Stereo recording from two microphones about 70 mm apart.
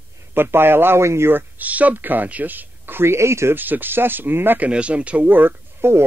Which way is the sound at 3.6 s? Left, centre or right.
Right.